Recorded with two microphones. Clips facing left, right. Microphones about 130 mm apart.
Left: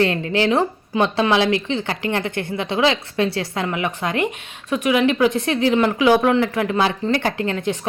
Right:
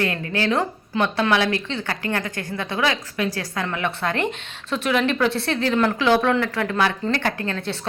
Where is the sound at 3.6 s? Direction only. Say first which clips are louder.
Left 2 dB; 10° left (ahead or behind).